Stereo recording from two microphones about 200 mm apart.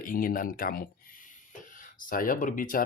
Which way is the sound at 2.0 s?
45° left (ahead or behind).